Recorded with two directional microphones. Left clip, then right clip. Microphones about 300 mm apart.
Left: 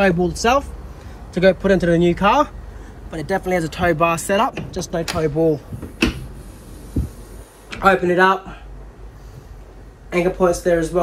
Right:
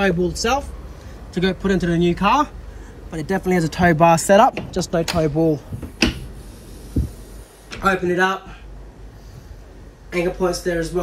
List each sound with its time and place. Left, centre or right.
0.0 s speech: centre
5.9 s a sound: centre
7.9 s speech: centre
10.0 s speech: centre